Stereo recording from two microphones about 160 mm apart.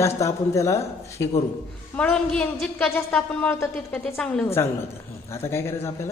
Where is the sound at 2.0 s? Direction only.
5° left (ahead or behind).